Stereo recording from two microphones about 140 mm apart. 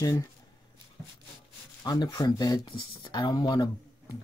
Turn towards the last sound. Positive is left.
turn(degrees=30)  # may be behind; listen again after turning